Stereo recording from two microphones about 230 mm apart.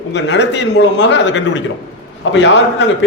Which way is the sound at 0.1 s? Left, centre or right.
Left.